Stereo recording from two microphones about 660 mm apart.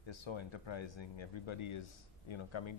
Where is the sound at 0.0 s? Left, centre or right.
Left.